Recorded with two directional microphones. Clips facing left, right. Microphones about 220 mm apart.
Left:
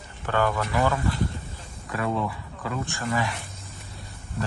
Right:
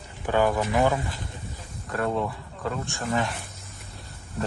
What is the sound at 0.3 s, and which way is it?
Speech, 15° right (ahead or behind).